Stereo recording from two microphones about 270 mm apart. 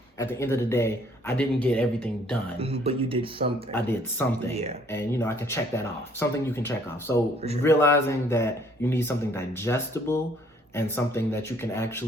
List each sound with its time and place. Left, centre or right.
0.2 s speech: centre
2.6 s speech: right
3.7 s speech: centre